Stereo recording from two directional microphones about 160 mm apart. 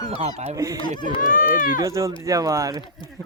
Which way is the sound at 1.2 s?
60° left (ahead or behind).